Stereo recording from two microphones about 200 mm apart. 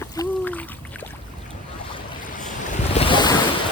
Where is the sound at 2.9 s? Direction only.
25° left (ahead or behind).